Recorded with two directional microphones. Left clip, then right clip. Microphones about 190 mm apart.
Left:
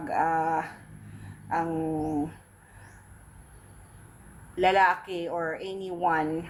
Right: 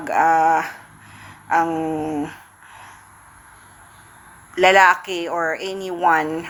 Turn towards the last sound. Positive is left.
turn(degrees=-5)  # may be behind; listen again after turning